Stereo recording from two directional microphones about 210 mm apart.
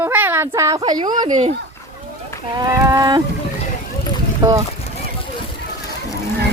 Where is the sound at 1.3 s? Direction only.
35° right (ahead or behind).